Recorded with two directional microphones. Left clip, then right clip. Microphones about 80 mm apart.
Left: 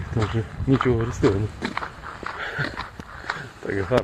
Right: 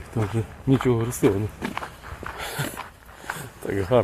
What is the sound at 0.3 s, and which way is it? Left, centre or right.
Speech, right.